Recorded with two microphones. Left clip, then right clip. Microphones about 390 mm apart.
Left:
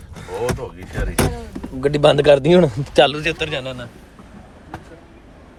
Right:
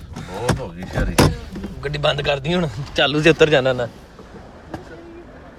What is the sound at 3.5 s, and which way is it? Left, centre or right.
Speech, centre.